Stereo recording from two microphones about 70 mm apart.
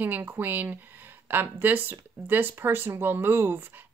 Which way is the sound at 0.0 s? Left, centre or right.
Right.